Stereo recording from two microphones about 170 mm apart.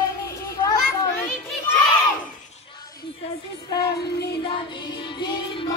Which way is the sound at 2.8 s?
25° left (ahead or behind).